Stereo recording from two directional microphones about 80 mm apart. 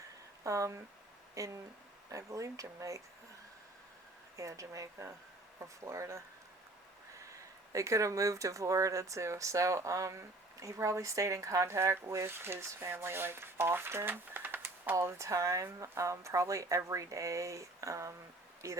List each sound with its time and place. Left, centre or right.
0.4 s speech: right
4.4 s speech: right
7.7 s speech: right
14.9 s speech: right